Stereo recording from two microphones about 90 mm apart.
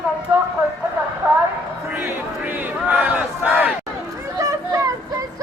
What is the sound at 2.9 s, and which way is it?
Battle cry, 20° right (ahead or behind).